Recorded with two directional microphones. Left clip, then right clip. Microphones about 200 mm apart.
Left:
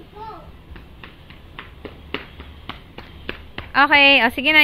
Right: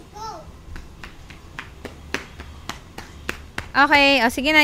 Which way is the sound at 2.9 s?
20° right (ahead or behind).